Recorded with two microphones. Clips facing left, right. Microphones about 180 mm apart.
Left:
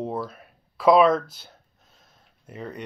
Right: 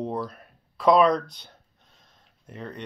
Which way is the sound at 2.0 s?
5° left (ahead or behind).